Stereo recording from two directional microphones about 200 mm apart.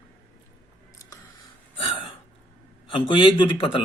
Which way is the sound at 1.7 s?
25° left (ahead or behind).